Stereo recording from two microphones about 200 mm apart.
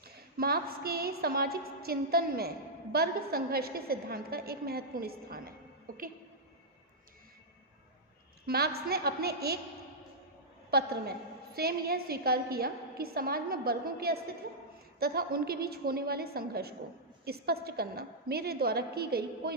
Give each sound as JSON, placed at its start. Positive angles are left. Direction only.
{"t": 0.0, "sound": "a woman's voice", "side_deg": -50}
{"t": 8.4, "sound": "a woman's voice", "side_deg": -50}
{"t": 10.7, "sound": "a woman's voice", "side_deg": -50}